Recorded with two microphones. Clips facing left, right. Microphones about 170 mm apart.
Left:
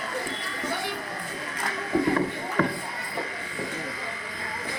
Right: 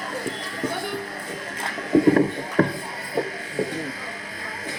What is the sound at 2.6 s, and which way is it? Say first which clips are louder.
Music: right 5 dB; 40° right (ahead or behind).